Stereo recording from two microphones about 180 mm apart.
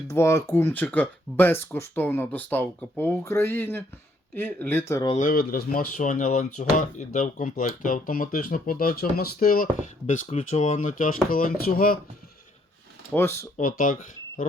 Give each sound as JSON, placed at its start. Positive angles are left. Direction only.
{"t": 0.1, "sound": "speech", "side_deg": 15}
{"t": 5.1, "sound": "speech", "side_deg": 50}
{"t": 10.1, "sound": "speech", "side_deg": 40}
{"t": 13.1, "sound": "speech", "side_deg": 15}
{"t": 13.6, "sound": "speech", "side_deg": 50}